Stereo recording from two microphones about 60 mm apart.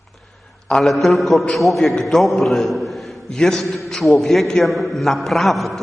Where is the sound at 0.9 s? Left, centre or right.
Centre.